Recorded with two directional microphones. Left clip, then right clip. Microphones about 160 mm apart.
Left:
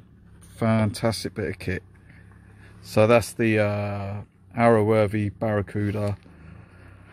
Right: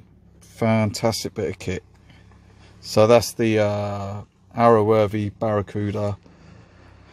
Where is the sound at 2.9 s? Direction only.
10° right (ahead or behind).